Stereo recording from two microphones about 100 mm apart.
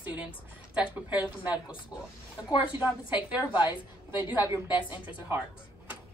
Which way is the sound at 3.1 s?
15° right (ahead or behind).